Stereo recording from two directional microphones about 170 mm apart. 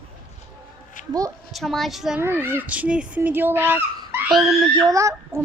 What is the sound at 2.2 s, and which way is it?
Speech, 15° right (ahead or behind).